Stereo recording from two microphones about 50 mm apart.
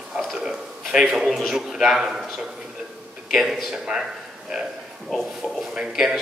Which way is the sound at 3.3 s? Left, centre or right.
Centre.